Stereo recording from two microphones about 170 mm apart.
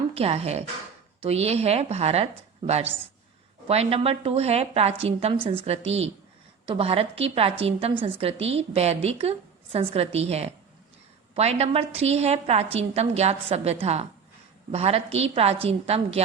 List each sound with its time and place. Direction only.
0.1 s a woman's voice: 35° right (ahead or behind)